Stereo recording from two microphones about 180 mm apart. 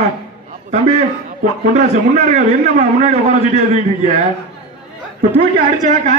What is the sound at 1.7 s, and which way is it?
A man's voice, 40° right (ahead or behind).